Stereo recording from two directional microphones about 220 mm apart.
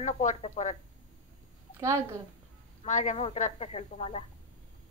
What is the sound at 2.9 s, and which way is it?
A woman's voice, 35° left (ahead or behind).